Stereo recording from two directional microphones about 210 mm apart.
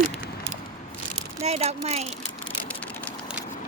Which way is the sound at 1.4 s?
30° right (ahead or behind).